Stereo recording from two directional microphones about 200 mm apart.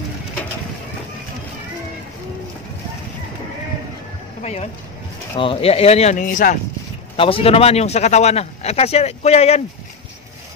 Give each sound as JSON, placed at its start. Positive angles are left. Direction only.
{"t": 4.4, "sound": "speech", "side_deg": 30}
{"t": 7.2, "sound": "speech", "side_deg": 25}